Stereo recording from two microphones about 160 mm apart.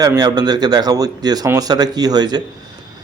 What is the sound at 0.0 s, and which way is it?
Speech, 25° right (ahead or behind).